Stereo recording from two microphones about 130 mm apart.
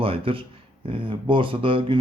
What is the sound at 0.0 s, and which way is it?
Speech, 45° right (ahead or behind).